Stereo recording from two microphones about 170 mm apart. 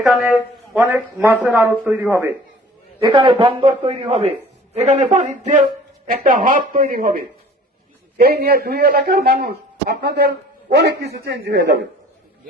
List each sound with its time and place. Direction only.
0.1 s a man's voice: 10° right (ahead or behind)
3.0 s a man's voice: 30° right (ahead or behind); by 11.9 s 85° right